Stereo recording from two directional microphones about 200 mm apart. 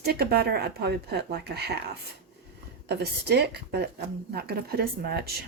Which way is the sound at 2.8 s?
55° right (ahead or behind).